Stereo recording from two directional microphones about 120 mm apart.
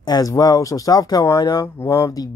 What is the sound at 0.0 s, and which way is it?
Speech, 35° left (ahead or behind).